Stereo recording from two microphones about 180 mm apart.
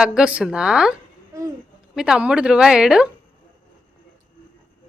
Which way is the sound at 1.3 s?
15° right (ahead or behind).